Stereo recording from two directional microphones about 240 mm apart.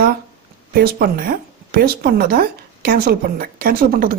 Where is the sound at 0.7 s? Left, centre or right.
Right.